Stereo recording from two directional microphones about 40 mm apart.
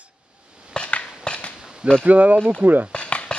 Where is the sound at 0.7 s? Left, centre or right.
Left.